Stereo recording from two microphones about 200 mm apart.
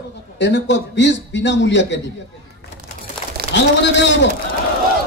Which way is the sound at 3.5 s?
65° left (ahead or behind).